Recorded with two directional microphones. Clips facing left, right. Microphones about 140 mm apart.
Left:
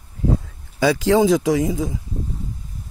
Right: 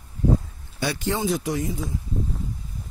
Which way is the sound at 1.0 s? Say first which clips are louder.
Left 9 dB; 90° left.